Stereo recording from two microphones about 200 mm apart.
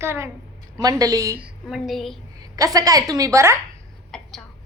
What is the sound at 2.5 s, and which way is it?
A woman's voice, 15° right (ahead or behind).